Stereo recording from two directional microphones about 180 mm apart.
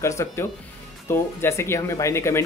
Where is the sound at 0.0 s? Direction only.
15° left (ahead or behind).